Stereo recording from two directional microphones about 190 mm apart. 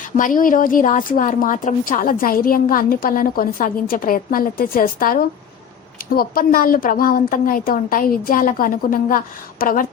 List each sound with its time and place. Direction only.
0.2 s a woman's voice: 45° left (ahead or behind)